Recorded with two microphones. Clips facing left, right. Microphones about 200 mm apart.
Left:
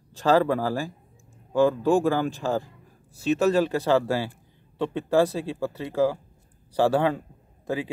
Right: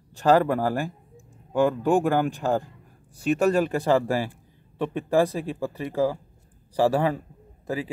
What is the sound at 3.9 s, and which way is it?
Speech, 15° right (ahead or behind).